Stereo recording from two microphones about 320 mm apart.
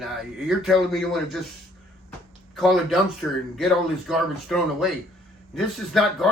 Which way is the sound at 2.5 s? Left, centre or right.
Centre.